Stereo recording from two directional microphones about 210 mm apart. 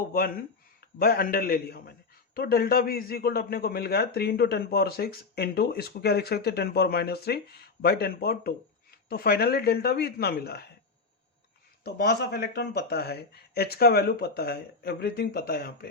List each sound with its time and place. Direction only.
0.9 s a man's voice: 45° left (ahead or behind)
11.8 s a man's voice: 50° left (ahead or behind)